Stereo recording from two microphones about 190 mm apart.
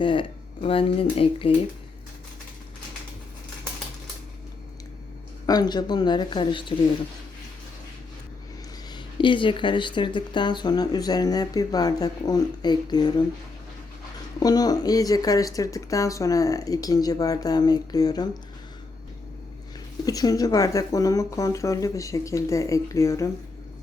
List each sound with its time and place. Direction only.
0.0 s speech: 25° left (ahead or behind)
5.5 s speech: 20° left (ahead or behind)
8.9 s speech: 25° left (ahead or behind)
14.3 s speech: 20° left (ahead or behind)
20.1 s speech: 20° left (ahead or behind)